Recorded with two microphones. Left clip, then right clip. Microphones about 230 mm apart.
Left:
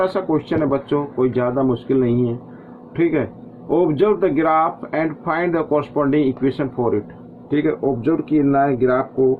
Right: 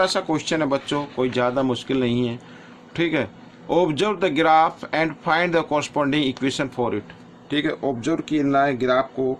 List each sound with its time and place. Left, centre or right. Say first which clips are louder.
0.0 s speech: left 2 dB; right